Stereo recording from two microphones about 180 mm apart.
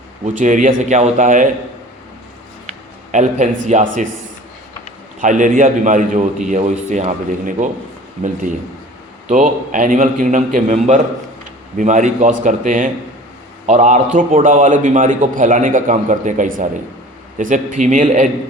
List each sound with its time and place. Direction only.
0.3 s a man's voice: 45° right (ahead or behind)
3.1 s speech: 40° right (ahead or behind)
5.2 s a man's voice: 45° right (ahead or behind)
9.3 s a man's voice: 45° right (ahead or behind)